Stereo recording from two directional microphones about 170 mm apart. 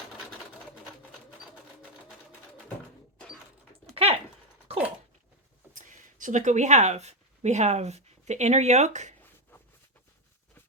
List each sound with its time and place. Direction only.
4.7 s dog: 35° right (ahead or behind)
5.7 s speech: 50° right (ahead or behind)